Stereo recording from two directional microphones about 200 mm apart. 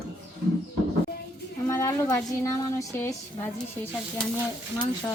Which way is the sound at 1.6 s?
15° left (ahead or behind).